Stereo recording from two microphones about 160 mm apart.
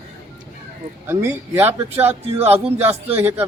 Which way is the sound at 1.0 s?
15° right (ahead or behind).